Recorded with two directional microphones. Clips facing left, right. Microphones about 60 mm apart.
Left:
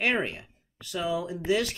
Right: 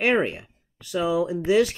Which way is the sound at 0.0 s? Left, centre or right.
Centre.